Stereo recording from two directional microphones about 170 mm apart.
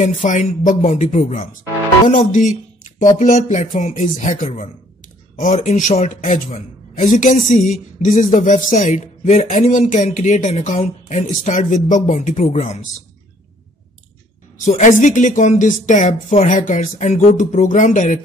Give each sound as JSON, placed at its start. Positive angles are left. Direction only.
{"t": 0.0, "sound": "speech", "side_deg": 45}
{"t": 14.6, "sound": "speech", "side_deg": 50}